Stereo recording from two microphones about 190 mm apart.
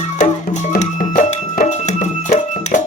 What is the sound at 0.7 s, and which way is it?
Music, 40° left (ahead or behind).